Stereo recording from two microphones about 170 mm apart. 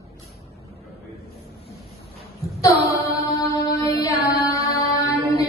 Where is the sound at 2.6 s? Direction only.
20° left (ahead or behind).